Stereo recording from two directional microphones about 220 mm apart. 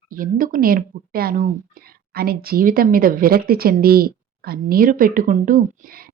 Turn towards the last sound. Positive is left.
turn(degrees=-40)  # may be behind; listen again after turning